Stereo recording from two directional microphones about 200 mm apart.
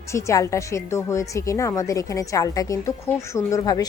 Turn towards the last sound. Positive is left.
turn(degrees=20)  # may be behind; listen again after turning